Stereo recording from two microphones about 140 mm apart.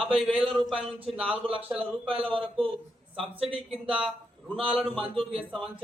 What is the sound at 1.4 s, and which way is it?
Speech, 40° right (ahead or behind).